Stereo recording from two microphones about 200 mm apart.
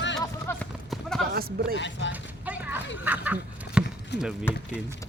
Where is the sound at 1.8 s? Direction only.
65° left (ahead or behind).